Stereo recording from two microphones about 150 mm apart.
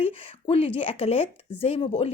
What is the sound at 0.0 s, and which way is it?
Speech, 40° left (ahead or behind).